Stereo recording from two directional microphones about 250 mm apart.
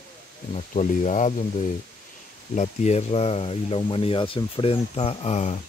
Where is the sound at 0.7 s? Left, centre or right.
Left.